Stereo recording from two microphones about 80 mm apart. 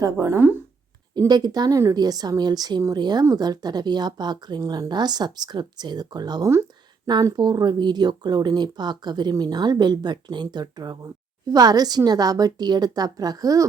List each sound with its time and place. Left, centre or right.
0.0 s a woman's voice: right
1.3 s a woman's voice: right